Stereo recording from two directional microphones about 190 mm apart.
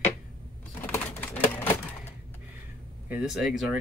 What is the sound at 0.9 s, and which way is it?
Typewriter, 10° left (ahead or behind).